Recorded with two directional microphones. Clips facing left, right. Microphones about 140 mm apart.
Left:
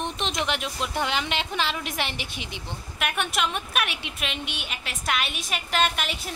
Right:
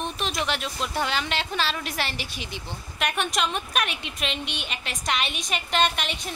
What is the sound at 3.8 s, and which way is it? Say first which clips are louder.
Speech: right 1 dB; 65° left (ahead or behind).